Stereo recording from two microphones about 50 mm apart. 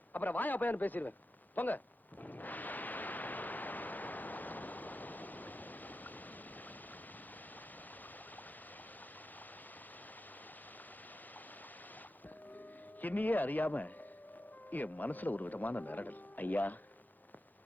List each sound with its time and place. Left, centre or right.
0.1 s speech: left
2.2 s a sound: left
13.0 s speech: left